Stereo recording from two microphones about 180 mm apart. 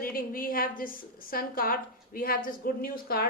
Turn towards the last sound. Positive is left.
turn(degrees=55)  # may be behind; listen again after turning